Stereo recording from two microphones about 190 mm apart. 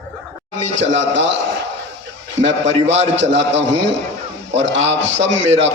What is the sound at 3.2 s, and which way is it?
Speech, 70° right (ahead or behind).